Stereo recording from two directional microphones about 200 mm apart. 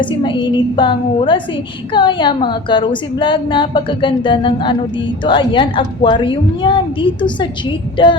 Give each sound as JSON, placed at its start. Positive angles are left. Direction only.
{"t": 0.0, "sound": "a woman's voice", "side_deg": 25}